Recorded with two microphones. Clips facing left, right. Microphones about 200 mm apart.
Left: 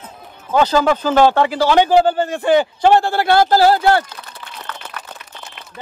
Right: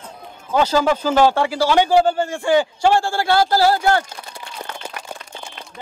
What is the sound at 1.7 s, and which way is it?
A man's voice, 55° left (ahead or behind).